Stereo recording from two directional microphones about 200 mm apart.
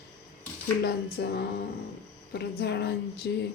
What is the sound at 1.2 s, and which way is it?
Speech, 55° left (ahead or behind).